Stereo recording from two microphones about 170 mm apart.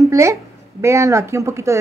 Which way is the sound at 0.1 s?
15° right (ahead or behind).